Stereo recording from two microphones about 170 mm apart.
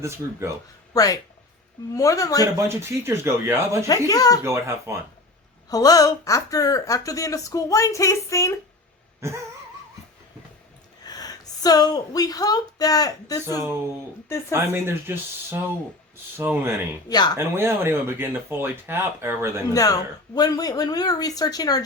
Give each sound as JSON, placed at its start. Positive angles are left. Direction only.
{"t": 0.0, "sound": "speech", "side_deg": -15}
{"t": 0.9, "sound": "speech", "side_deg": 20}
{"t": 2.6, "sound": "speech", "side_deg": -15}
{"t": 3.8, "sound": "speech", "side_deg": 20}
{"t": 4.4, "sound": "speech", "side_deg": -15}
{"t": 5.6, "sound": "speech", "side_deg": 20}
{"t": 11.0, "sound": "a woman's voice", "side_deg": 20}
{"t": 14.5, "sound": "speech", "side_deg": -15}
{"t": 17.1, "sound": "speech", "side_deg": 25}
{"t": 17.3, "sound": "speech", "side_deg": -15}
{"t": 19.7, "sound": "speech", "side_deg": 20}